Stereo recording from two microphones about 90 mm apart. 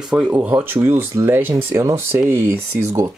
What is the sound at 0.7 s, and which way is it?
Speech, 25° right (ahead or behind).